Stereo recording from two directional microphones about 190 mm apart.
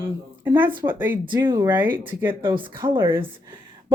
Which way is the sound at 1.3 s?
25° right (ahead or behind).